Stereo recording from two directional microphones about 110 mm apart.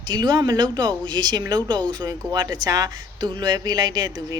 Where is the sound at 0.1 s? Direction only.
40° right (ahead or behind).